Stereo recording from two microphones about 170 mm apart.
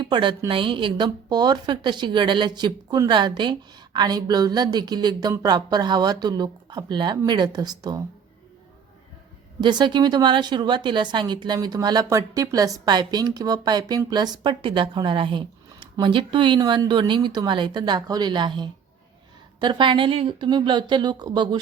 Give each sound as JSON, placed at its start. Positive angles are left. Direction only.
{"t": 0.0, "sound": "a woman's voice", "side_deg": -30}
{"t": 9.6, "sound": "a woman's voice", "side_deg": -25}